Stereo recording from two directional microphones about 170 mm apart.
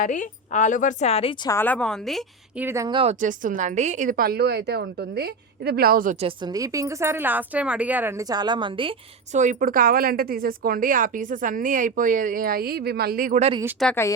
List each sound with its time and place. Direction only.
0.0 s a woman's voice: 50° left (ahead or behind)
1.5 s a woman's voice: 10° left (ahead or behind)
2.6 s a woman's voice: 15° right (ahead or behind)
2.9 s a woman's voice: 35° right (ahead or behind)
3.2 s a woman's voice: 50° right (ahead or behind)
6.1 s a woman's voice: 30° right (ahead or behind)
6.5 s a woman's voice: 20° right (ahead or behind)
9.3 s speech: 45° right (ahead or behind)
13.8 s a woman's voice: centre (ahead or behind)